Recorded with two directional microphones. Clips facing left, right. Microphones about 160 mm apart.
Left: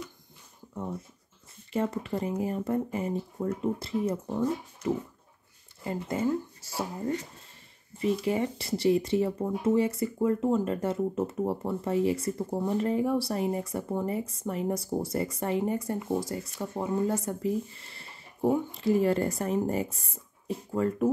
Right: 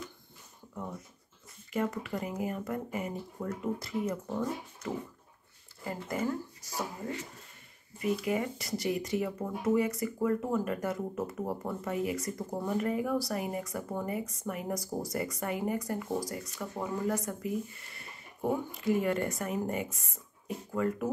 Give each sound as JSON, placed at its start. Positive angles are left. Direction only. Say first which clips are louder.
{"t": 1.7, "sound": "speech", "louder": "left 3 dB", "side_deg": 30}
{"t": 8.0, "sound": "speech", "louder": "left 3 dB", "side_deg": 30}